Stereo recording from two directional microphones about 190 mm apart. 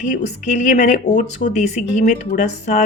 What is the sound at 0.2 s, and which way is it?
Speech, 40° left (ahead or behind).